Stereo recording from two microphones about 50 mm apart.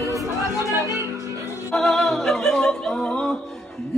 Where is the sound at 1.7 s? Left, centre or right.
Centre.